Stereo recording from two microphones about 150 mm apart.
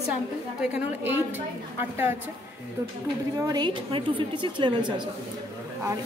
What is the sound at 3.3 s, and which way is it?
A woman's voice, 25° right (ahead or behind).